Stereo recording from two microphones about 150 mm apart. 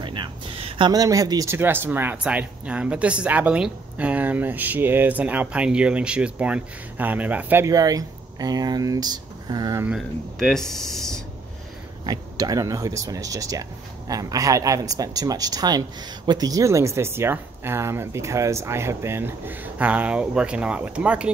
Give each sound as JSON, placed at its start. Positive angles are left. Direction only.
{"t": 0.0, "sound": "speech", "side_deg": -30}
{"t": 7.6, "sound": "speech", "side_deg": -25}
{"t": 9.8, "sound": "speech", "side_deg": 0}
{"t": 12.1, "sound": "speech", "side_deg": -25}